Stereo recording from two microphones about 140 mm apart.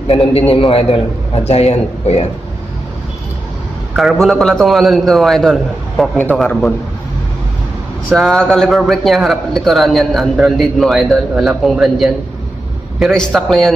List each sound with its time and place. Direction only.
0.1 s a man's voice: 45° left (ahead or behind)
3.9 s a man's voice: centre (ahead or behind)
8.1 s a man's voice: centre (ahead or behind)